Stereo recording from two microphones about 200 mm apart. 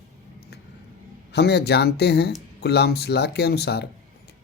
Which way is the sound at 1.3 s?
55° left (ahead or behind).